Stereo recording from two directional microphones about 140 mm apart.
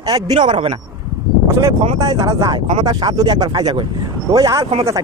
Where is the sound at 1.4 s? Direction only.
20° right (ahead or behind).